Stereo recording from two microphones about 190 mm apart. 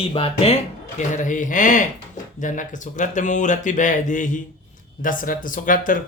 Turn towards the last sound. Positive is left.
turn(degrees=45)  # may be behind; listen again after turning